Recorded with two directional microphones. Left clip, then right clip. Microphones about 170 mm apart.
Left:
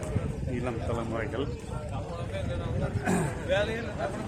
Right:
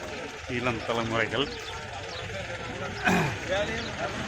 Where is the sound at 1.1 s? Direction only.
20° right (ahead or behind).